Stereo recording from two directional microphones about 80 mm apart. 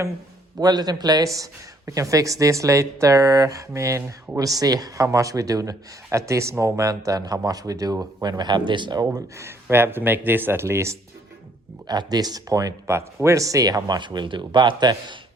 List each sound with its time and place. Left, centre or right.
0.6 s speech: right
4.6 s speech: right
9.4 s speech: right
11.9 s speech: right